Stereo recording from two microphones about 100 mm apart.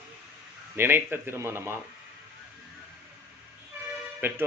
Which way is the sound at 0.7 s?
20° right (ahead or behind).